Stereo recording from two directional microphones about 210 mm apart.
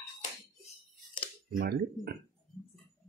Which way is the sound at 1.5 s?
45° right (ahead or behind).